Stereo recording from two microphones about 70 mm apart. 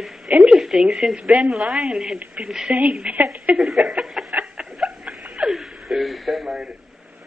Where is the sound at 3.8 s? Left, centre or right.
Centre.